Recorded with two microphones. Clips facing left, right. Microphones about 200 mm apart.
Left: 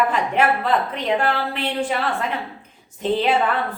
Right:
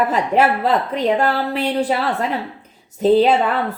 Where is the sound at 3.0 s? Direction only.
40° right (ahead or behind).